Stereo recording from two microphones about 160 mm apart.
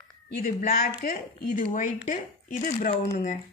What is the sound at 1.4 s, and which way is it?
Speech, 55° left (ahead or behind).